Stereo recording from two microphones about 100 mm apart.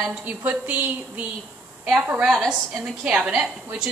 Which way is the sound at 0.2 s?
15° right (ahead or behind).